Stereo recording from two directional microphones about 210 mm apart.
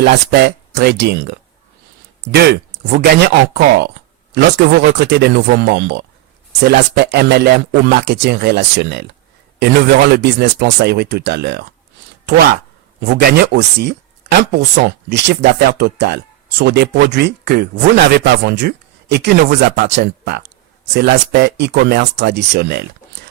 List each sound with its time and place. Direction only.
0.0 s speech: 50° right (ahead or behind)
13.0 s speech: 50° right (ahead or behind)